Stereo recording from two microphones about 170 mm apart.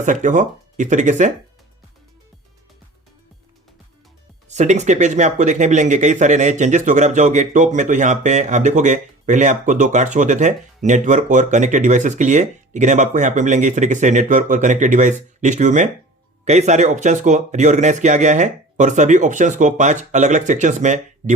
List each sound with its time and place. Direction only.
0.0 s speech: 45° right (ahead or behind)
4.4 s speech: 45° right (ahead or behind)